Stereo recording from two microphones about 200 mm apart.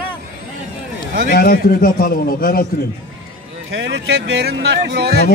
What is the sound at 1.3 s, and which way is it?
A man's voice, 45° left (ahead or behind).